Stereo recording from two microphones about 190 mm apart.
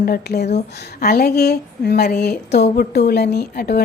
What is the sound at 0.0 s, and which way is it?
A woman's voice, 55° left (ahead or behind).